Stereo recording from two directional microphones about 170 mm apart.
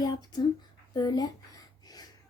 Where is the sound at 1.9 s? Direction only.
20° left (ahead or behind).